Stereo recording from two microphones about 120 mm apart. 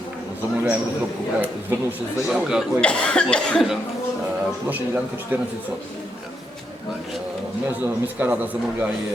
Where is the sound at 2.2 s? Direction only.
5° right (ahead or behind).